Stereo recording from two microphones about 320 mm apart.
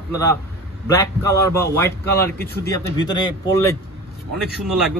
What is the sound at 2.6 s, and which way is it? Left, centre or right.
A man's voice, centre.